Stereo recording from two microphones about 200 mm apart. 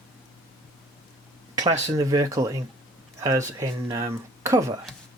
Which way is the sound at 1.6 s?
15° right (ahead or behind).